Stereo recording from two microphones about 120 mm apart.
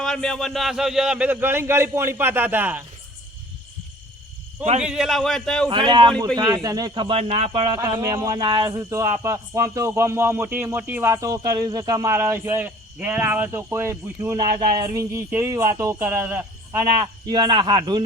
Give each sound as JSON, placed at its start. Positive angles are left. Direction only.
{"t": 0.0, "sound": "a man's voice", "side_deg": 5}
{"t": 4.8, "sound": "a man's voice", "side_deg": -5}
{"t": 5.6, "sound": "speech", "side_deg": -40}
{"t": 8.0, "sound": "speech", "side_deg": -30}
{"t": 17.2, "sound": "speech", "side_deg": -40}